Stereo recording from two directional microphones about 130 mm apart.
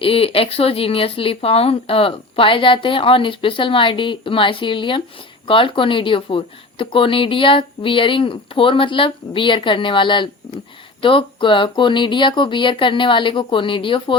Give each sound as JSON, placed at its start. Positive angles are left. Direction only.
{"t": 0.0, "sound": "speech", "side_deg": 45}